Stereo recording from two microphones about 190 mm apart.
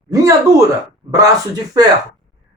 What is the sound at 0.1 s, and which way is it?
Speech, 15° right (ahead or behind).